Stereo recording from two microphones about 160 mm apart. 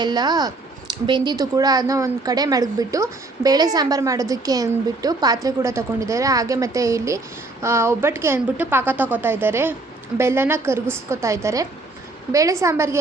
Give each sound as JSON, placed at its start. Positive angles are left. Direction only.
{"t": 0.0, "sound": "a woman's voice", "side_deg": -25}